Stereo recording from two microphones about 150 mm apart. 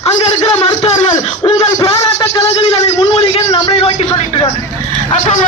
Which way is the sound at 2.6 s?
40° left (ahead or behind).